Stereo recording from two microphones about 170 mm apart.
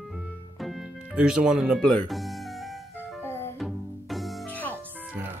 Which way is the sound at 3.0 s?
15° left (ahead or behind).